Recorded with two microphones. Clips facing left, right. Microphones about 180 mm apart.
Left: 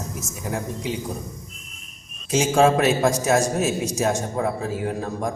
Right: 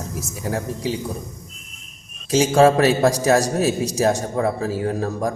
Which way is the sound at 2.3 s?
35° right (ahead or behind).